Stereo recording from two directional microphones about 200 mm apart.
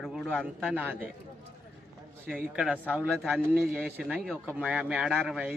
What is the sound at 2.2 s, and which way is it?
Speech, 5° right (ahead or behind).